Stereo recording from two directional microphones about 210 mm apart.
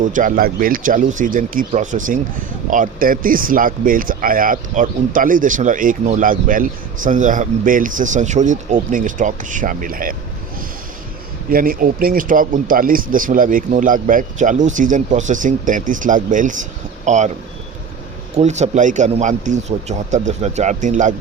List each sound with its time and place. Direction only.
0.0 s speech: 40° right (ahead or behind)
11.5 s speech: 45° right (ahead or behind)
18.3 s speech: 35° right (ahead or behind)